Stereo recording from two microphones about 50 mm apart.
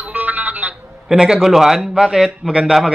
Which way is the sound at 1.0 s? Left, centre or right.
Centre.